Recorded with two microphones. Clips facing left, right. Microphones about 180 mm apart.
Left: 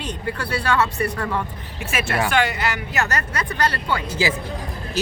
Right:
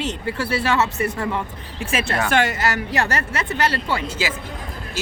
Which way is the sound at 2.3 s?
45° right (ahead or behind).